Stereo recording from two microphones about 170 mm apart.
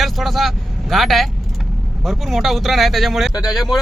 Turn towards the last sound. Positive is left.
turn(degrees=0)  # may be behind; listen again after turning